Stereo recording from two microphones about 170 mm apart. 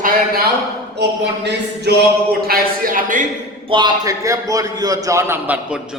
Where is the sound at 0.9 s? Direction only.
80° right.